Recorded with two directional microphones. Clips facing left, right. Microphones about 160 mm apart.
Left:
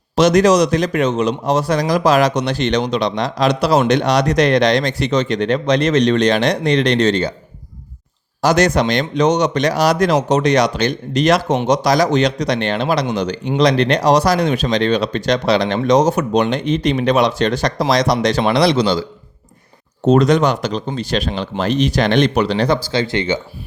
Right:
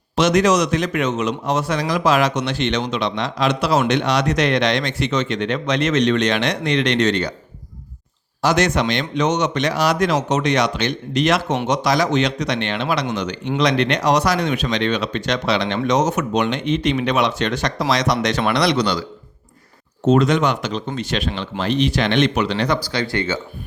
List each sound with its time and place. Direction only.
0.2 s speech: 40° left (ahead or behind)
8.4 s speech: 40° left (ahead or behind)
20.1 s speech: 40° left (ahead or behind); by 23.4 s 20° left (ahead or behind)